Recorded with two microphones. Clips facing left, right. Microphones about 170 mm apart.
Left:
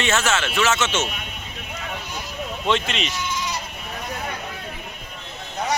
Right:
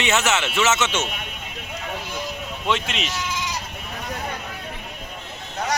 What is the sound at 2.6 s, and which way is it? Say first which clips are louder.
Speech: left 2 dB; 5° right (ahead or behind).